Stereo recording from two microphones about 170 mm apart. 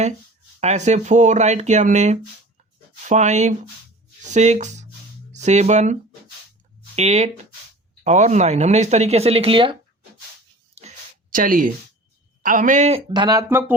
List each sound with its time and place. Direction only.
0.6 s speech: 45° right (ahead or behind)
10.8 s a sound: 45° right (ahead or behind)
12.4 s speech: 50° right (ahead or behind); by 13.4 s 25° right (ahead or behind)
13.5 s speech: 15° right (ahead or behind)